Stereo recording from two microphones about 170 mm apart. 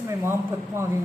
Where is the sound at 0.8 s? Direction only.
15° right (ahead or behind).